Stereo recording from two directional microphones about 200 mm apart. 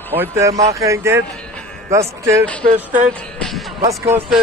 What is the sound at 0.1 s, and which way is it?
Speech, 10° right (ahead or behind).